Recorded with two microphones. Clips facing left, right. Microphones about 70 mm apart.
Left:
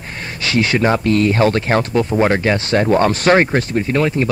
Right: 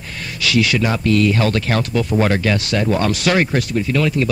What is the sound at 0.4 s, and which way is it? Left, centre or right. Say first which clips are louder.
Speech: left 1 dB; left.